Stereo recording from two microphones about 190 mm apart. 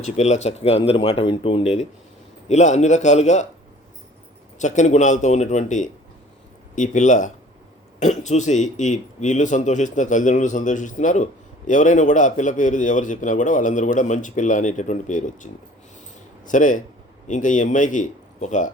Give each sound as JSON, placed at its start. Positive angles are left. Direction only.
{"t": 0.0, "sound": "speech", "side_deg": 35}
{"t": 4.6, "sound": "speech", "side_deg": 40}
{"t": 16.5, "sound": "speech", "side_deg": 45}